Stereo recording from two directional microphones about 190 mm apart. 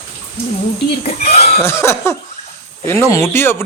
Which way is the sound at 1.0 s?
35° left (ahead or behind).